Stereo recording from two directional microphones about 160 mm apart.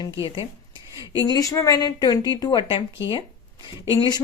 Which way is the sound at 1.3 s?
20° left (ahead or behind).